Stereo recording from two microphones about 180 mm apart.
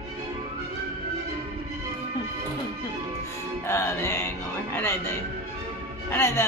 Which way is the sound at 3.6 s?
15° left (ahead or behind).